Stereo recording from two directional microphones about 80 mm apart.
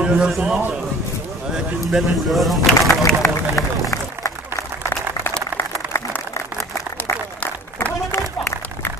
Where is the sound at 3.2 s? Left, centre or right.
Left.